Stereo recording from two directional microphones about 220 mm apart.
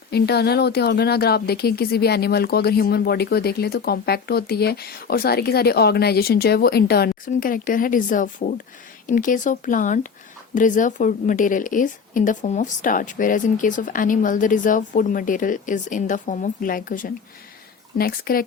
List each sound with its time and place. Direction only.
0.1 s a woman's voice: 45° left (ahead or behind)